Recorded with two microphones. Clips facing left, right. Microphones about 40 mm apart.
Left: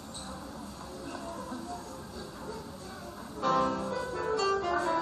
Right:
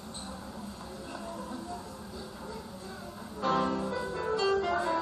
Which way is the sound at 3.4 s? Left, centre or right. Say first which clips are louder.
Left 1 dB; centre.